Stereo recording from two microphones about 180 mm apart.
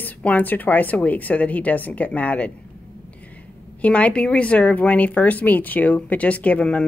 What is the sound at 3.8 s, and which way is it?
Speech, 5° left (ahead or behind).